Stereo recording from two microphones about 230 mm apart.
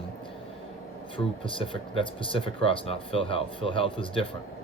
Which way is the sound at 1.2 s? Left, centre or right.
Left.